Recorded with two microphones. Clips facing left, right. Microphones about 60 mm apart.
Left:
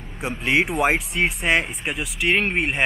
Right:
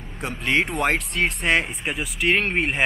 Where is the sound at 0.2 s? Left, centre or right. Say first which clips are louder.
Left 1 dB; centre.